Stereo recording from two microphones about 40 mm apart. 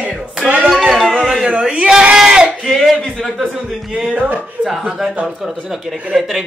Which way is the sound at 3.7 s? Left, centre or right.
Centre.